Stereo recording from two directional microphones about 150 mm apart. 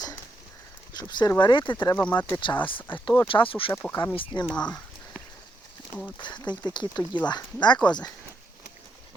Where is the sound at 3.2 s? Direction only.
35° left (ahead or behind).